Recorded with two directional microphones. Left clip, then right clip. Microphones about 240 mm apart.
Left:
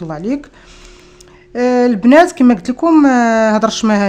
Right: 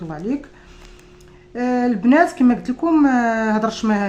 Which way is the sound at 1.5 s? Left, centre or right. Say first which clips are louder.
Left 8 dB; left.